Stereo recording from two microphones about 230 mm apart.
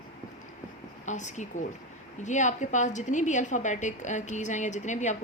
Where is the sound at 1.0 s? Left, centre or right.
Left.